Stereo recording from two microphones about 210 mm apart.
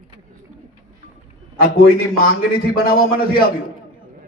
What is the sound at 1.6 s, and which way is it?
Speech, 45° left (ahead or behind).